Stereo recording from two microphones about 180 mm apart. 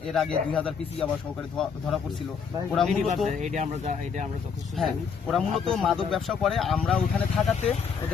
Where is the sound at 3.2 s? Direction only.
40° right (ahead or behind).